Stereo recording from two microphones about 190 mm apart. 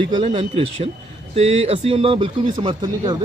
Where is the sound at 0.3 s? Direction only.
30° right (ahead or behind).